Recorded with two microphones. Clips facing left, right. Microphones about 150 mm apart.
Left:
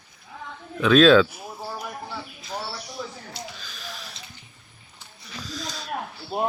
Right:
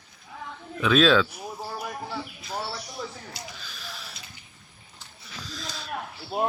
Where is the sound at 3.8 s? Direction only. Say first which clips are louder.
Left 4 dB; centre (ahead or behind).